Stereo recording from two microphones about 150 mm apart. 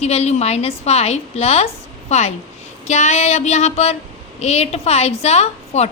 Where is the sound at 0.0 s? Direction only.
45° left (ahead or behind).